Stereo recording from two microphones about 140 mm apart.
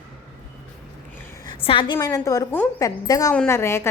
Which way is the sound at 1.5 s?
40° left (ahead or behind).